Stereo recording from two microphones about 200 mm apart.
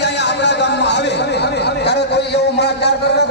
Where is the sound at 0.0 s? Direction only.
60° left (ahead or behind).